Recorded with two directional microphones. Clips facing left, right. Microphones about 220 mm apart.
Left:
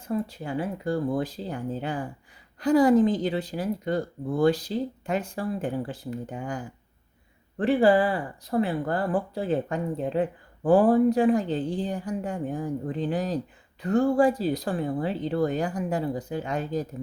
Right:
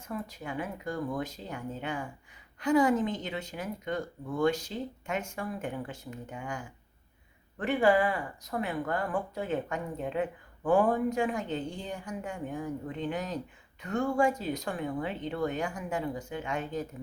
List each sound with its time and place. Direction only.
0.1 s speech: 30° left (ahead or behind)